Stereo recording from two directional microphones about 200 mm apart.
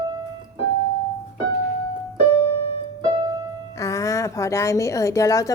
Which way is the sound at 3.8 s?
15° left (ahead or behind).